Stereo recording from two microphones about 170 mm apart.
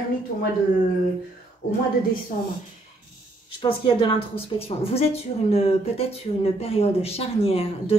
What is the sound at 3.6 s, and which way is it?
A woman's voice, 30° left (ahead or behind).